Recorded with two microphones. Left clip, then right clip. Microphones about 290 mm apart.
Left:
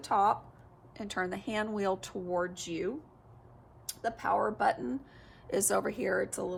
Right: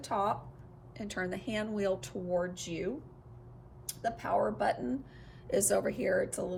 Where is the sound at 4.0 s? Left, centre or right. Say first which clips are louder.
Left 1 dB; centre.